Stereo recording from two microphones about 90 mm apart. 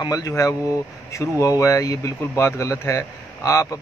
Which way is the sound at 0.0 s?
40° left (ahead or behind).